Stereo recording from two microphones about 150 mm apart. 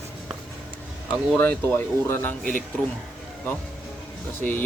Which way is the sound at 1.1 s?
10° left (ahead or behind).